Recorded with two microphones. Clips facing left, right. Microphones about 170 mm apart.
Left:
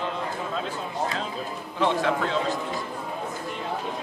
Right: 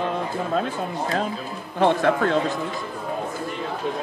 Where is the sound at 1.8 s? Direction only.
55° right (ahead or behind).